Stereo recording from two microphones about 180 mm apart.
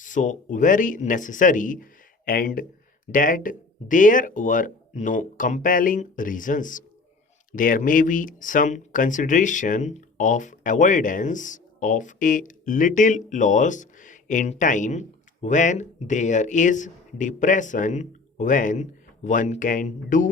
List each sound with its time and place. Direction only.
0.0 s speech: 45° left (ahead or behind)